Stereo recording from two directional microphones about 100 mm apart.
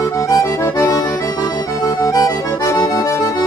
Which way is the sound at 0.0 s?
30° left (ahead or behind).